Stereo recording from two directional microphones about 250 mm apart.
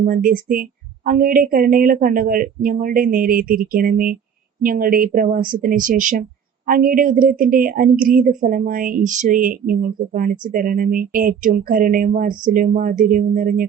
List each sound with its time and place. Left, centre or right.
0.0 s a woman's voice: right